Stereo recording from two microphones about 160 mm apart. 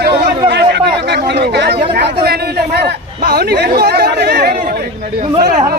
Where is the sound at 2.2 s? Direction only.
80° right; by 4.9 s 65° right (ahead or behind).